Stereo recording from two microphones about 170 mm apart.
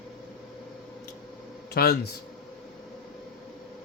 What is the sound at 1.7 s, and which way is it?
Speech, 70° left (ahead or behind).